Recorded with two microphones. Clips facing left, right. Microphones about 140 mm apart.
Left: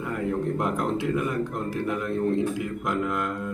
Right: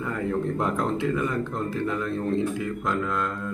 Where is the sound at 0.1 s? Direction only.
10° left (ahead or behind).